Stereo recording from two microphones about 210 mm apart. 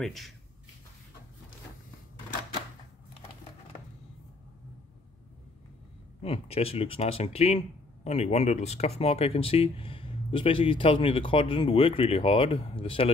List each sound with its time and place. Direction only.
0.0 s speech: centre (ahead or behind)
6.2 s speech: 25° left (ahead or behind)